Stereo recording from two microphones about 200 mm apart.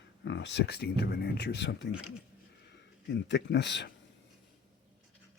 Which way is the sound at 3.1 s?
60° left (ahead or behind).